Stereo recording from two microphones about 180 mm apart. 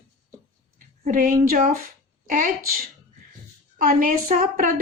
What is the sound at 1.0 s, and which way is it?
A woman's voice, 50° right (ahead or behind).